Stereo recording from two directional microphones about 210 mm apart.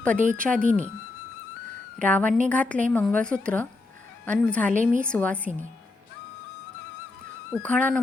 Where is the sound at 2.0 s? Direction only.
5° left (ahead or behind).